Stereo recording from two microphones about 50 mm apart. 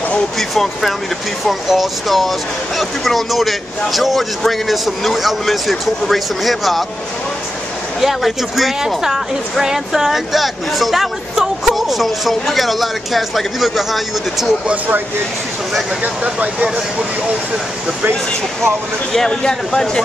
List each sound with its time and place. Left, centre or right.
0.4 s speech: centre
8.0 s speech: centre
16.0 s speech: right
19.1 s speech: centre